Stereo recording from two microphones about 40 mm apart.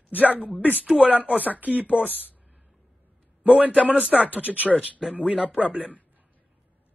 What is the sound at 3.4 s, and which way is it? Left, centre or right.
Speech, right.